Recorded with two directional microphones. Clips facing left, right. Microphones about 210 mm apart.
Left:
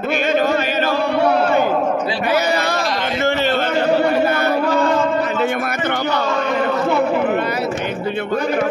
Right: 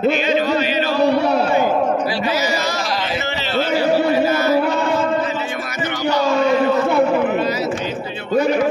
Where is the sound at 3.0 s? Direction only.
50° left (ahead or behind).